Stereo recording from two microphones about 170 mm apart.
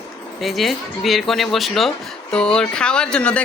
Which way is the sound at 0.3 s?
Centre (ahead or behind).